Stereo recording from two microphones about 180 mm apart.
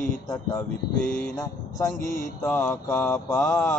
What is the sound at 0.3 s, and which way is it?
Male singing, 20° left (ahead or behind).